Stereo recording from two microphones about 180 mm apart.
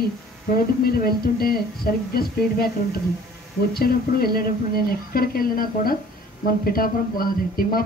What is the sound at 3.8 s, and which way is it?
Speech, 55° left (ahead or behind).